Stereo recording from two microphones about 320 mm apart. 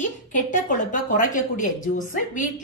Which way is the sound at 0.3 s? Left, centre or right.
Left.